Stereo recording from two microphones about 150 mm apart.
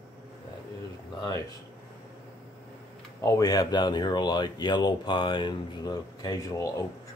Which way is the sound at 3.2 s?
25° left (ahead or behind).